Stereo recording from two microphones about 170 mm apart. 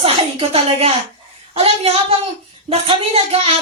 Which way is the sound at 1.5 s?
35° right (ahead or behind).